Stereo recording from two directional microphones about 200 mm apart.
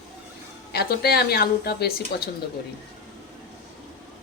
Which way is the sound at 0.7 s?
50° left (ahead or behind).